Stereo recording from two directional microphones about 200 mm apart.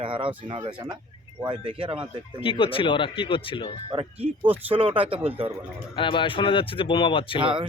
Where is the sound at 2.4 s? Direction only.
25° left (ahead or behind).